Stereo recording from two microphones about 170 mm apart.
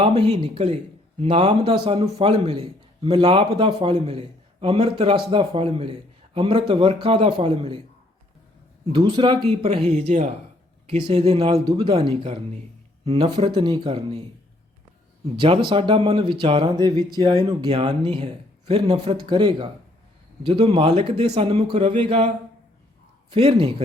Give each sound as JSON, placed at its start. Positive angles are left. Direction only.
{"t": 0.0, "sound": "a man's voice", "side_deg": -35}
{"t": 8.9, "sound": "a man's voice", "side_deg": -25}
{"t": 11.7, "sound": "speech", "side_deg": -25}
{"t": 11.9, "sound": "a man's voice", "side_deg": -35}
{"t": 15.4, "sound": "a man's voice", "side_deg": -30}
{"t": 23.3, "sound": "a man's voice", "side_deg": -35}